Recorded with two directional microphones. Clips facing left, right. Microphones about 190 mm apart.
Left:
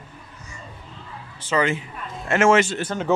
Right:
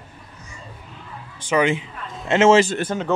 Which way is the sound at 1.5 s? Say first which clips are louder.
Right 3 dB; 15° right (ahead or behind).